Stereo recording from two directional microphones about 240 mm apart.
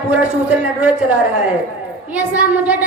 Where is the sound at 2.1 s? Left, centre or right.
Centre.